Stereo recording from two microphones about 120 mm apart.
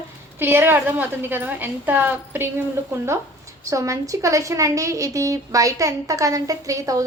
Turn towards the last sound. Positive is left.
turn(degrees=-30)  # may be behind; listen again after turning